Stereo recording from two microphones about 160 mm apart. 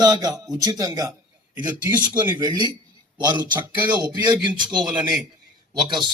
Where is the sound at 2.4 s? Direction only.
25° right (ahead or behind).